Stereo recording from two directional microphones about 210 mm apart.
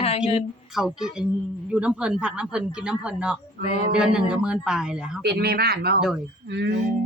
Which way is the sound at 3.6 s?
30° left (ahead or behind).